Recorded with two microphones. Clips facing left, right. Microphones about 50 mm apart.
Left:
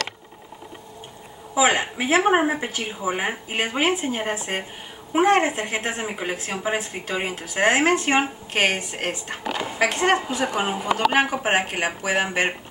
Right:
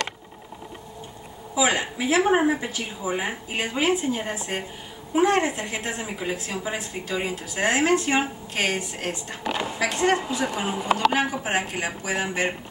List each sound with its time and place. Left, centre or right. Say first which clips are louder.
1.5 s a woman's voice: left 3 dB; left